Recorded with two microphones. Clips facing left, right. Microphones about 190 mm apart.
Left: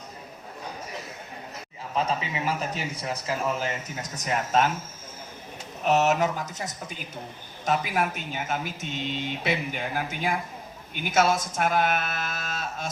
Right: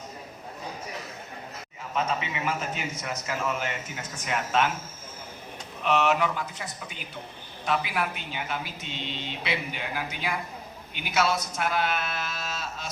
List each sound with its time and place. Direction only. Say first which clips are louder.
2.0 s a man's voice: left 1 dB; 35° left (ahead or behind)
5.8 s speech: left 2 dB; 40° left (ahead or behind)